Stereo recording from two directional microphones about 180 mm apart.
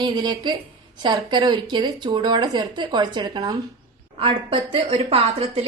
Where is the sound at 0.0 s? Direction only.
25° right (ahead or behind).